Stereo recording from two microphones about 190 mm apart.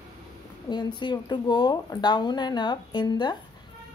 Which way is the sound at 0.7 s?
25° left (ahead or behind).